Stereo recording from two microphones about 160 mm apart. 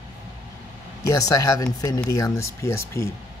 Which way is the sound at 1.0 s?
20° left (ahead or behind).